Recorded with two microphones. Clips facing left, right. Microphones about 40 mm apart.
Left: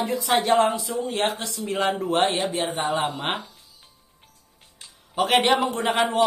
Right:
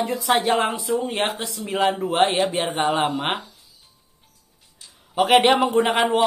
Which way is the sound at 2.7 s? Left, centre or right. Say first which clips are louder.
Right 4 dB; right.